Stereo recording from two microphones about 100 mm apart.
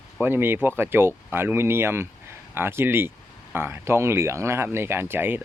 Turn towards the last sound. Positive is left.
turn(degrees=-20)  # may be behind; listen again after turning